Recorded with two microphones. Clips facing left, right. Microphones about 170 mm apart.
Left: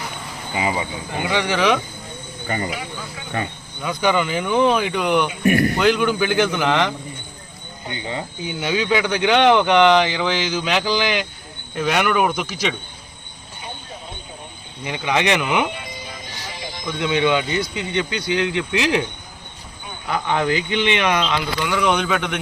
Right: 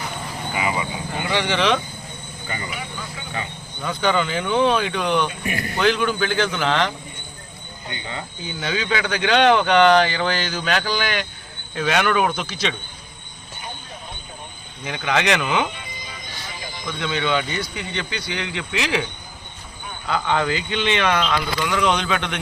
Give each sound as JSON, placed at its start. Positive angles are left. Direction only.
{"t": 0.5, "sound": "a sound", "side_deg": 30}
{"t": 1.3, "sound": "speech", "side_deg": 10}
{"t": 3.8, "sound": "speech", "side_deg": 10}
{"t": 5.4, "sound": "speech", "side_deg": 50}
{"t": 5.8, "sound": "speech", "side_deg": 15}
{"t": 14.8, "sound": "speech", "side_deg": 15}
{"t": 16.8, "sound": "speech", "side_deg": 15}
{"t": 20.1, "sound": "speech", "side_deg": 15}